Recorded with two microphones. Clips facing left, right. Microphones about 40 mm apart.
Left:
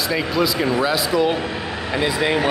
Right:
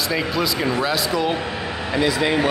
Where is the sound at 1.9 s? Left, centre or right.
Centre.